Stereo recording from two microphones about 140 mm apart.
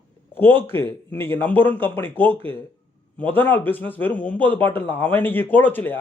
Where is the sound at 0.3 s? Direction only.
15° left (ahead or behind).